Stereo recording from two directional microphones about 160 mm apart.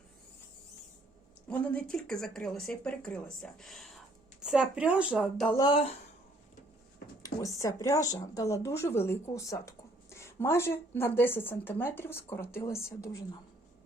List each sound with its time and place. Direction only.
1.5 s speech: 5° left (ahead or behind)
5.5 s speech: 30° left (ahead or behind)
7.2 s speech: 20° left (ahead or behind)